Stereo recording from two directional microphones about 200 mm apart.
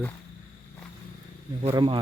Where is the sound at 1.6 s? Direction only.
25° right (ahead or behind).